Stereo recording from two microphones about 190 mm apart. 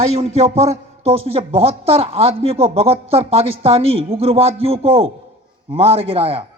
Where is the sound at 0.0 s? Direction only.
35° right (ahead or behind).